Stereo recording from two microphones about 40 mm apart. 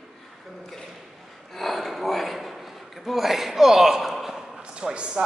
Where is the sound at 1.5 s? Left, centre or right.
Centre.